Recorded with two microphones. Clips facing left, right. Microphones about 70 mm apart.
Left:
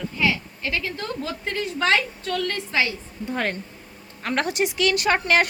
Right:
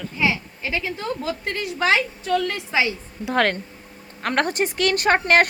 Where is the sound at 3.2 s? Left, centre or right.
Right.